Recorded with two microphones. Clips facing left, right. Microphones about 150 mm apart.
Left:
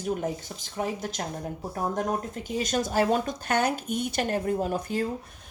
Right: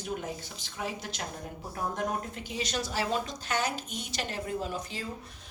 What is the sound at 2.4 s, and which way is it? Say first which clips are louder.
Speech: left 9 dB; 45° left (ahead or behind).